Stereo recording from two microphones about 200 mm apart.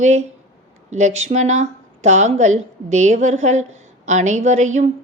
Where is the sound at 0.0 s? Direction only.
35° right (ahead or behind).